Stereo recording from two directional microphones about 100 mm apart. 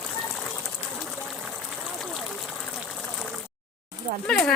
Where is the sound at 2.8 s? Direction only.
5° left (ahead or behind).